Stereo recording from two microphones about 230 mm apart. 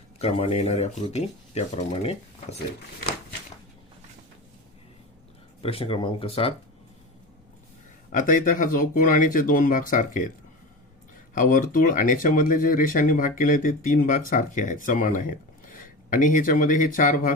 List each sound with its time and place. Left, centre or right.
0.2 s speech: left
5.6 s speech: left
8.1 s speech: left
11.3 s speech: left